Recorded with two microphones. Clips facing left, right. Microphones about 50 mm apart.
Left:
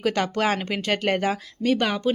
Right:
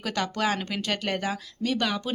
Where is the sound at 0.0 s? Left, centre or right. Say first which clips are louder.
Left 5 dB; left.